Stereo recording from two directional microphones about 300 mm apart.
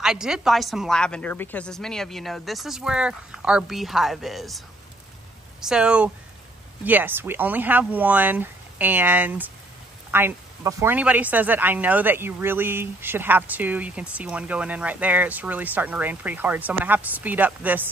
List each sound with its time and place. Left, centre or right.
0.0 s speech: centre